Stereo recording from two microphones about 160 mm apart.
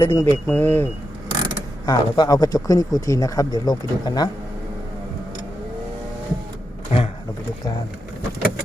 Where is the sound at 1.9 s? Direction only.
25° left (ahead or behind).